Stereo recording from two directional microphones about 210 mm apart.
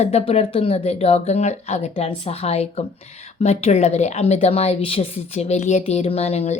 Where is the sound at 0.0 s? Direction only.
30° left (ahead or behind).